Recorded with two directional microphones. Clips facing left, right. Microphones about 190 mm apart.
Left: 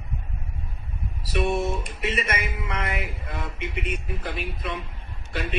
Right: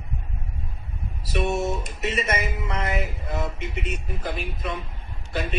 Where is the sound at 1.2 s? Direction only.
45° right (ahead or behind).